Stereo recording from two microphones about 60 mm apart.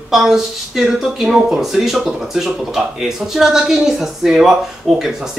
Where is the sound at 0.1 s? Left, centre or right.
Centre.